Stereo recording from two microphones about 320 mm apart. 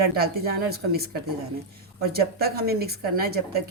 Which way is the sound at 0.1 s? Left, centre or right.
Right.